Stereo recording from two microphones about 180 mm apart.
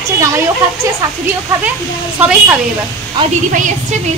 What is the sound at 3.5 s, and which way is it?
Speech, 45° right (ahead or behind).